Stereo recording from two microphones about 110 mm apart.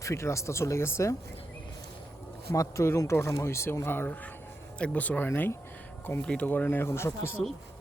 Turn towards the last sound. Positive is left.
turn(degrees=25)  # may be behind; listen again after turning